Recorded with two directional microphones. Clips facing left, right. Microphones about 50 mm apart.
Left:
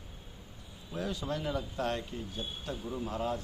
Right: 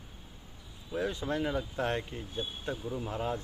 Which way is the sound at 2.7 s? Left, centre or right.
Centre.